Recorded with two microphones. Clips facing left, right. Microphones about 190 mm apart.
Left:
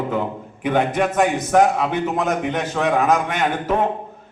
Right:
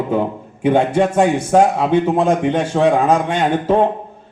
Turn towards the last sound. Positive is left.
turn(degrees=-30)  # may be behind; listen again after turning